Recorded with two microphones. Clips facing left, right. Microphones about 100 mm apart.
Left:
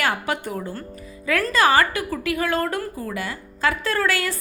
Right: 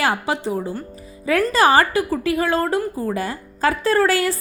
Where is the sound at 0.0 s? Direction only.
30° right (ahead or behind).